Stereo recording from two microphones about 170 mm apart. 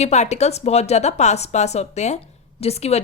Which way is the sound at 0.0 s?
40° left (ahead or behind).